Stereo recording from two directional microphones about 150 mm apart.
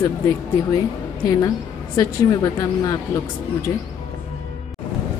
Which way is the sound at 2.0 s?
25° left (ahead or behind).